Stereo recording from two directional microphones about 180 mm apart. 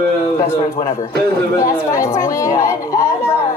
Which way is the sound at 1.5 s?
15° left (ahead or behind).